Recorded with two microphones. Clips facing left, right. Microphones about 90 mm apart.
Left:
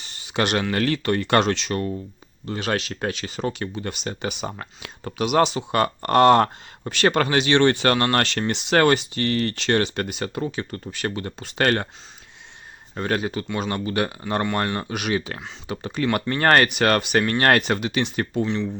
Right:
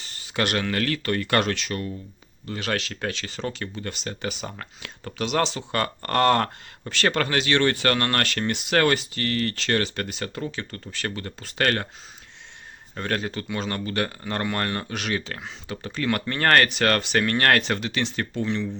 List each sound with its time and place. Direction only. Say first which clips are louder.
0.0 s a sound: left 3 dB; 20° left (ahead or behind)
0.7 s speech: left 3 dB; 25° left (ahead or behind)
12.9 s speech: left 3 dB; 15° left (ahead or behind)
18.4 s speech: left 2 dB; centre (ahead or behind)